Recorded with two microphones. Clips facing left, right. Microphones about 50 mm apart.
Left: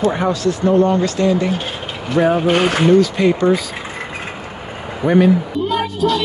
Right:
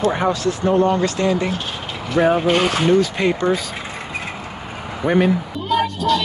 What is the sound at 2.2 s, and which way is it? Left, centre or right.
Speech, right.